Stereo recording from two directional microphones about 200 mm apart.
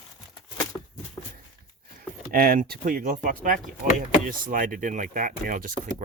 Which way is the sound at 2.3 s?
50° right (ahead or behind).